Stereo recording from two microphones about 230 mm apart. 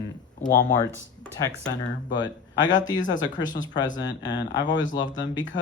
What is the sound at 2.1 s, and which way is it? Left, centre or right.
Speech, centre.